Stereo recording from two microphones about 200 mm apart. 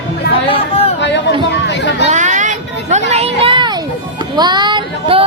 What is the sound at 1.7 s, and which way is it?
Chatter, 60° left (ahead or behind).